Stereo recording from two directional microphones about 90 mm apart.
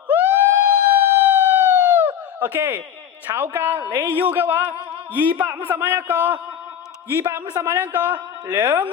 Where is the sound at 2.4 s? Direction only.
20° right (ahead or behind).